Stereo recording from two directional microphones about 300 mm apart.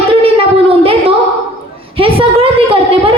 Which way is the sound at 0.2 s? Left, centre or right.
Centre.